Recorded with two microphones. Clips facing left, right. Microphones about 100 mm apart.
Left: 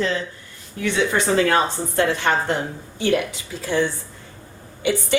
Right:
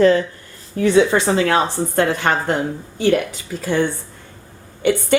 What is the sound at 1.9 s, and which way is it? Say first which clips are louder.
Speech: right 1 dB; 50° right (ahead or behind).